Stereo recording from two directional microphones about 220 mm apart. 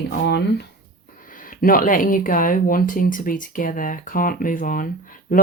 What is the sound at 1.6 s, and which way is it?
Speech, 40° left (ahead or behind).